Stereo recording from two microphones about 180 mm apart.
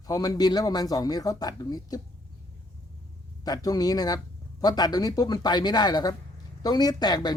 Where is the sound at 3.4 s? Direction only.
20° left (ahead or behind).